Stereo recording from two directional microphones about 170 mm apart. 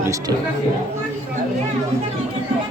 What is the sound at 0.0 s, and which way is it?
Speech, 20° right (ahead or behind).